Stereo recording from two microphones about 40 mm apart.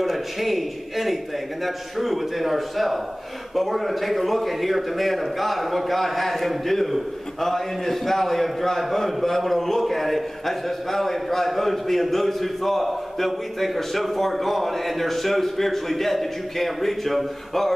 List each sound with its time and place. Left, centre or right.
0.0 s a man's voice: centre